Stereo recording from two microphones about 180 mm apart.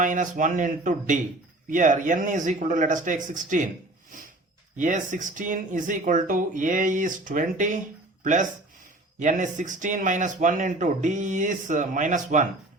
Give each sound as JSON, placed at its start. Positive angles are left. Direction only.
{"t": 0.0, "sound": "speech", "side_deg": -45}
{"t": 4.8, "sound": "speech", "side_deg": -45}